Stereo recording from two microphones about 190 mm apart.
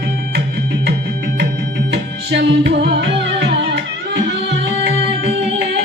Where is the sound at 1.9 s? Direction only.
60° right (ahead or behind).